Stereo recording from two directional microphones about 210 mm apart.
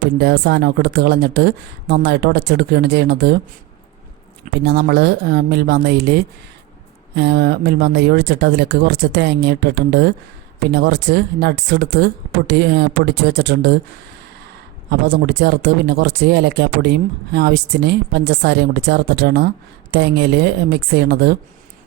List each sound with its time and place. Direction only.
0.2 s speech: 50° right (ahead or behind)
4.6 s speech: 50° right (ahead or behind)
14.8 s speech: 50° right (ahead or behind)